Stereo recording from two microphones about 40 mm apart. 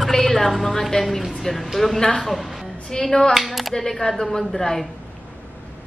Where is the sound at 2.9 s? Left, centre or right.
Centre.